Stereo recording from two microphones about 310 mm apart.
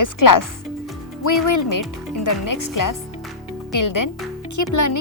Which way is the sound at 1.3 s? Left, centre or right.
Left.